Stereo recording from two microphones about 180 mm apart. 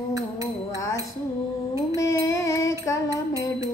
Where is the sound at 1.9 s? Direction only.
15° left (ahead or behind).